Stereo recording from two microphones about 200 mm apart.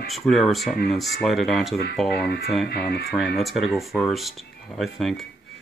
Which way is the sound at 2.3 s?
50° left (ahead or behind).